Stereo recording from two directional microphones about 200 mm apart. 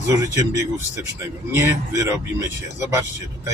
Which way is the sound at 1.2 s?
15° right (ahead or behind).